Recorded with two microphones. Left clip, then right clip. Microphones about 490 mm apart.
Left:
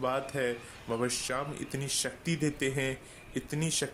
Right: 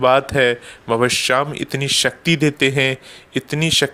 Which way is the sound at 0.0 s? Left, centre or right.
Left.